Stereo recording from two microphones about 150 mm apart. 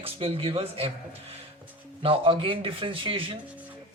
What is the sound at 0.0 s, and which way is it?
Speech, 40° right (ahead or behind).